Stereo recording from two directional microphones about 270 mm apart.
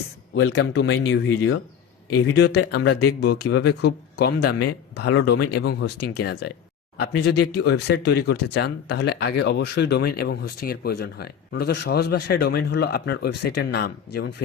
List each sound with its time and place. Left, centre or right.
0.3 s speech: left
7.5 s speech: left